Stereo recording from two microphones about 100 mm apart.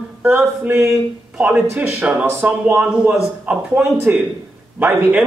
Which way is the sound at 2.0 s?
15° right (ahead or behind).